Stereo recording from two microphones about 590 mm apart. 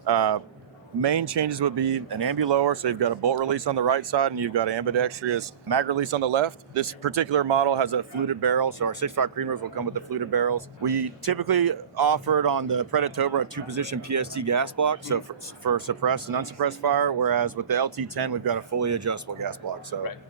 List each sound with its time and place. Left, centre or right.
0.0 s speech: right